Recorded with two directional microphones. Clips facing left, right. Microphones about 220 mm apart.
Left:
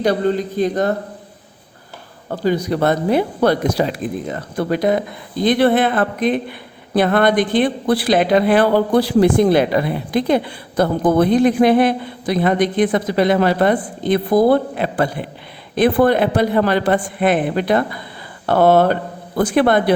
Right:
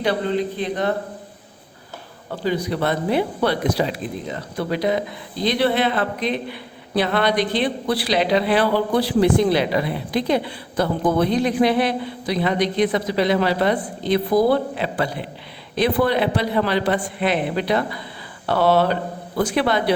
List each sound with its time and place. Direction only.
0.0 s speech: 45° left (ahead or behind)
2.3 s speech: 45° left (ahead or behind)